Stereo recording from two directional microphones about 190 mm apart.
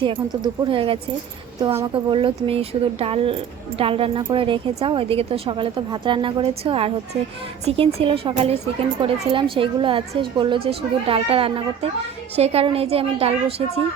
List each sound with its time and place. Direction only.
0.0 s a woman's voice: 25° right (ahead or behind)